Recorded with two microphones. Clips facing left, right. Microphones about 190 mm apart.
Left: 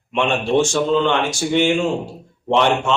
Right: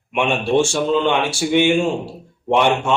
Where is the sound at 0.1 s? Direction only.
10° right (ahead or behind).